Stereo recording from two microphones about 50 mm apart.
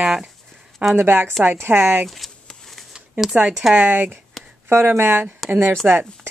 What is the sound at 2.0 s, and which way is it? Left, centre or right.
Speech, centre.